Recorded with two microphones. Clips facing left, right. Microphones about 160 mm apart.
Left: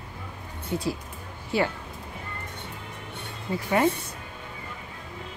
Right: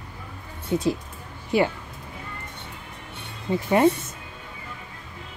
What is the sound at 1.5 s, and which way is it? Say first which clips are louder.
Speech: right 4 dB; 15° right (ahead or behind).